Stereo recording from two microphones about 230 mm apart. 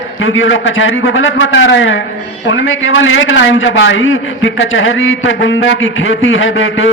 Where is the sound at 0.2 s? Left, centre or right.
Left.